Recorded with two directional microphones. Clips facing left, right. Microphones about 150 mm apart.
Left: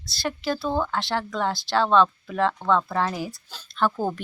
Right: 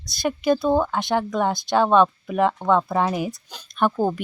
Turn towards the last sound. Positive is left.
turn(degrees=-15)  # may be behind; listen again after turning